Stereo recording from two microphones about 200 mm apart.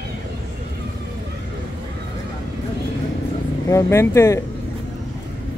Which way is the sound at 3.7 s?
15° left (ahead or behind).